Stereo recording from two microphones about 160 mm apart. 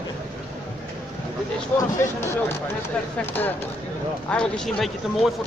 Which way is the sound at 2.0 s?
15° left (ahead or behind).